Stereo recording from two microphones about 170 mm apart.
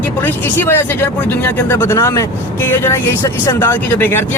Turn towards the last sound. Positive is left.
turn(degrees=15)  # may be behind; listen again after turning